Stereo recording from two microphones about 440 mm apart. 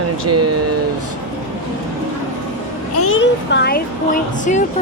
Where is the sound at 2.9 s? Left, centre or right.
Left.